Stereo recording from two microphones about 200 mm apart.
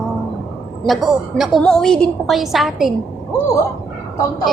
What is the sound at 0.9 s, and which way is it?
A woman's voice, centre (ahead or behind).